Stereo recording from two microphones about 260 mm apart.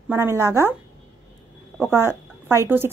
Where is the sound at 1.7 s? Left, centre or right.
Centre.